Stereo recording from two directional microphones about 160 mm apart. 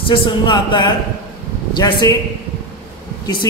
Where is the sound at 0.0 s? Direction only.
30° left (ahead or behind).